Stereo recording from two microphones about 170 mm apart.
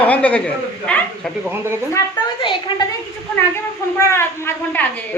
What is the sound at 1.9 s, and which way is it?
Speech, 25° left (ahead or behind).